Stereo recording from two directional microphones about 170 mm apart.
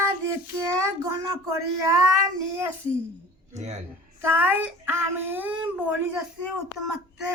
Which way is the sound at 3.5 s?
40° right (ahead or behind).